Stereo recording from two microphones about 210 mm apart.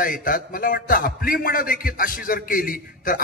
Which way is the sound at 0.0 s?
40° left (ahead or behind).